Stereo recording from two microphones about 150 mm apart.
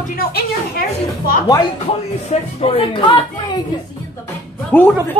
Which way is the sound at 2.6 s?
35° left (ahead or behind).